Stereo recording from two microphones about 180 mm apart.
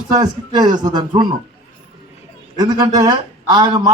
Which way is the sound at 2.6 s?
20° right (ahead or behind).